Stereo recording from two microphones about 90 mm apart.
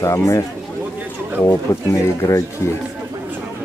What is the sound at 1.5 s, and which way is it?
Speech, 35° left (ahead or behind).